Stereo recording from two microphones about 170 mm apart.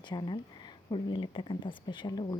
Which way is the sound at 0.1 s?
25° left (ahead or behind).